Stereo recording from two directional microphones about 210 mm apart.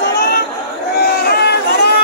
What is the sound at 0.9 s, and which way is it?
Crowd, 50° left (ahead or behind).